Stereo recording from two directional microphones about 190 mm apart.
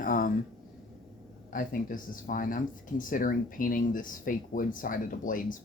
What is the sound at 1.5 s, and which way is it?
Speech, 45° left (ahead or behind).